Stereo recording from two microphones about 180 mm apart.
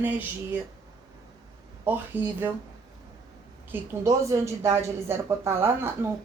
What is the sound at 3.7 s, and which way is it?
A woman's voice, 15° right (ahead or behind).